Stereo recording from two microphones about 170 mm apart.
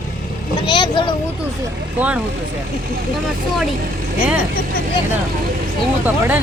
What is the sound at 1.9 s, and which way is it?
Speech, 10° right (ahead or behind).